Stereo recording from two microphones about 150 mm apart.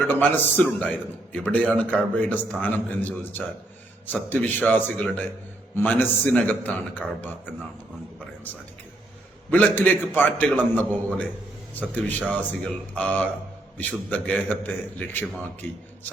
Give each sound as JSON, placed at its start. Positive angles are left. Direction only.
{"t": 0.1, "sound": "a man's voice", "side_deg": 15}
{"t": 9.5, "sound": "a man's voice", "side_deg": 10}